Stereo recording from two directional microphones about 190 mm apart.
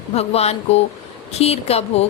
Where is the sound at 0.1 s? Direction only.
35° left (ahead or behind).